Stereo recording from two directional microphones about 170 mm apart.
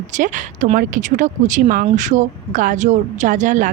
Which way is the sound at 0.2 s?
50° right (ahead or behind).